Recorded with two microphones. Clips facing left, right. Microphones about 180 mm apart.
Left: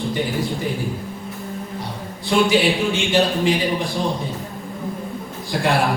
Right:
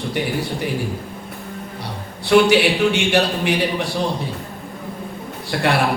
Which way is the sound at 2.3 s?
65° right (ahead or behind).